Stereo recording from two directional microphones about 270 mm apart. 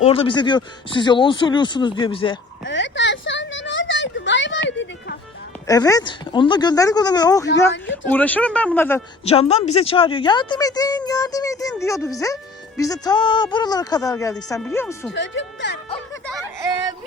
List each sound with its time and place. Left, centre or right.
0.0 s a woman's voice: left
2.6 s a sound: left
5.6 s a woman's voice: centre
7.4 s speech: left
8.1 s speech: centre
9.2 s a woman's voice: left
15.1 s speech: left